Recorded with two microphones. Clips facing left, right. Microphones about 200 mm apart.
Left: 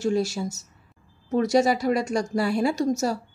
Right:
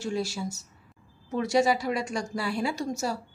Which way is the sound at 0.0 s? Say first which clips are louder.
Left 6 dB; 45° left (ahead or behind).